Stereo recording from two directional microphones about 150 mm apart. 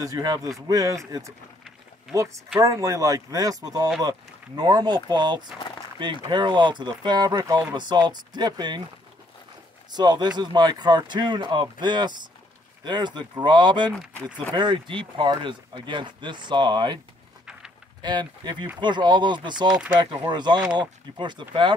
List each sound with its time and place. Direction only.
0.0 s speech: 25° right (ahead or behind)
9.9 s speech: 30° right (ahead or behind)
13.9 s speech: 10° left (ahead or behind)
14.5 s speech: 30° right (ahead or behind)
18.0 s speech: 30° right (ahead or behind)